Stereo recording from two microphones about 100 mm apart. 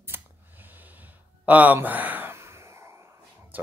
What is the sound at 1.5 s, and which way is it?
Speech, 15° right (ahead or behind).